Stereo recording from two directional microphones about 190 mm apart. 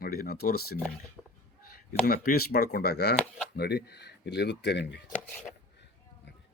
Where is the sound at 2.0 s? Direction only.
55° left (ahead or behind).